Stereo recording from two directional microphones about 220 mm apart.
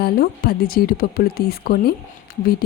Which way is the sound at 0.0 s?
45° left (ahead or behind).